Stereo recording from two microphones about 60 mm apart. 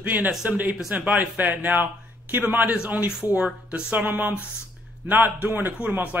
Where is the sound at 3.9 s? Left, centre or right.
Right.